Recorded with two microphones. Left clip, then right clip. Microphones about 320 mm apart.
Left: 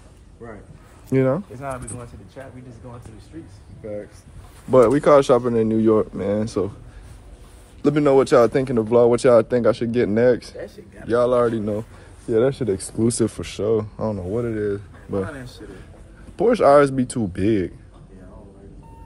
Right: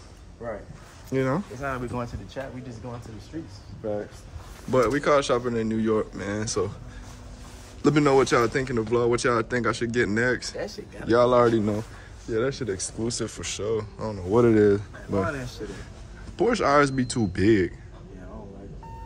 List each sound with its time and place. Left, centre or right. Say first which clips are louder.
0.4 s speech: right 5 dB; centre
1.1 s speech: left 6 dB; left
4.6 s speech: left 8 dB; centre
7.8 s speech: left 4 dB; centre
12.3 s speech: left 7 dB; centre
14.3 s speech: right 9 dB; centre
16.3 s speech: left 7 dB; centre